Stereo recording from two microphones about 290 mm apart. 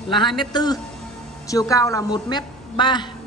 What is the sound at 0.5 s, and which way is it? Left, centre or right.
A woman's voice, centre.